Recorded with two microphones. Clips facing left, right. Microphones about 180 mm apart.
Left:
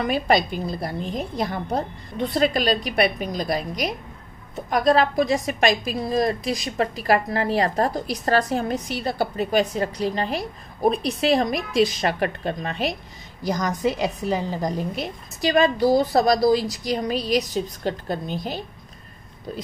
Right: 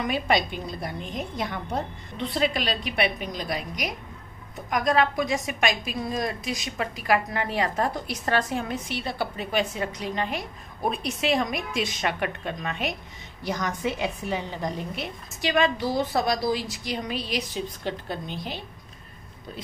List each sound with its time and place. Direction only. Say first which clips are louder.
0.0 s a woman's voice: left 4 dB; 40° left (ahead or behind)